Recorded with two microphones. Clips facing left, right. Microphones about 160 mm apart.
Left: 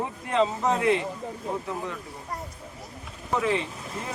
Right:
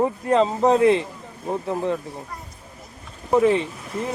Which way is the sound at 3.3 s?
35° right (ahead or behind).